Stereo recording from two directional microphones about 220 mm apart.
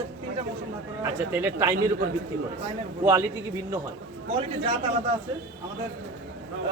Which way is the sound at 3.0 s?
10° right (ahead or behind).